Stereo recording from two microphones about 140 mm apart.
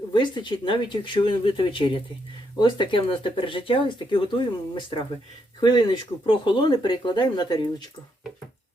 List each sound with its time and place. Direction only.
0.1 s speech: 35° left (ahead or behind)